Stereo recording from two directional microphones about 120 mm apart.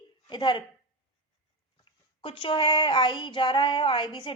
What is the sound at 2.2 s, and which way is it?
A woman's voice, 50° left (ahead or behind).